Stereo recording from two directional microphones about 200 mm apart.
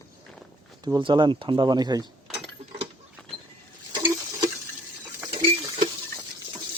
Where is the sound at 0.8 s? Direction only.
20° right (ahead or behind).